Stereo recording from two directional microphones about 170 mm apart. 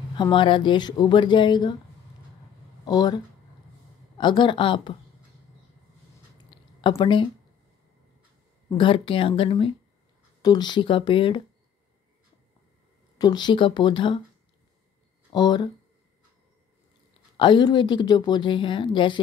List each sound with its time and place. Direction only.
0.1 s a woman's voice: 30° left (ahead or behind)
2.8 s speech: 25° left (ahead or behind)
4.2 s a woman's voice: 25° left (ahead or behind)
6.3 s a sound: 30° left (ahead or behind)
8.6 s a woman's voice: 30° left (ahead or behind)
13.2 s a woman's voice: 25° left (ahead or behind)
15.3 s a woman's voice: 25° left (ahead or behind)
17.4 s a woman's voice: 25° left (ahead or behind)